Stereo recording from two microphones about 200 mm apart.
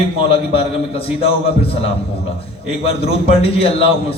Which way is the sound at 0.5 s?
30° left (ahead or behind).